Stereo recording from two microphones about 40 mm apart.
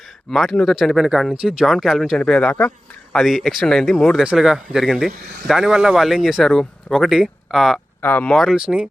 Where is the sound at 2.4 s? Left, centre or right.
Left.